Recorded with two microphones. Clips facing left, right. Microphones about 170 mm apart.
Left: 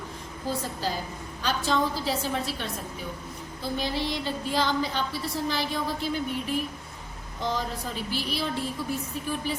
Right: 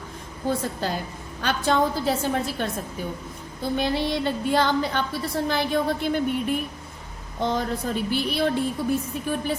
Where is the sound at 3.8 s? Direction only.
60° right (ahead or behind).